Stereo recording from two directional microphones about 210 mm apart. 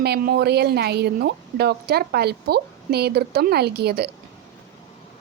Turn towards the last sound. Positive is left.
turn(degrees=-50)  # may be behind; listen again after turning